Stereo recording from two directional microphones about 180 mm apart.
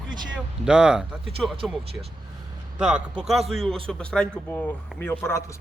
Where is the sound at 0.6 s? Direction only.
5° right (ahead or behind).